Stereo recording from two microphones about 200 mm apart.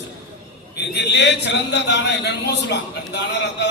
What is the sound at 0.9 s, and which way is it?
A man's voice, 60° left (ahead or behind).